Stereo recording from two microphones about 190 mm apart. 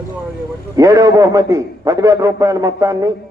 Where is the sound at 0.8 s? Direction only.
15° right (ahead or behind).